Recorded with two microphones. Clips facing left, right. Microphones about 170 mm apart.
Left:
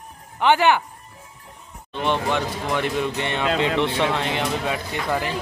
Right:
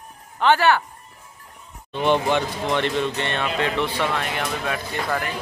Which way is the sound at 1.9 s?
Centre (ahead or behind).